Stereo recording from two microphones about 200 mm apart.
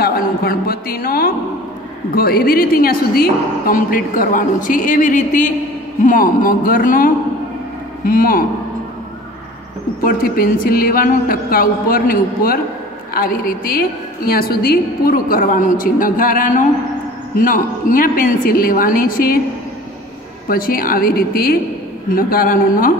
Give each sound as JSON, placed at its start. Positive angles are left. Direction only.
{"t": 0.0, "sound": "a sound", "side_deg": 45}
{"t": 2.1, "sound": "a woman's voice", "side_deg": 50}
{"t": 10.0, "sound": "a woman's voice", "side_deg": 45}
{"t": 20.4, "sound": "a woman's voice", "side_deg": 45}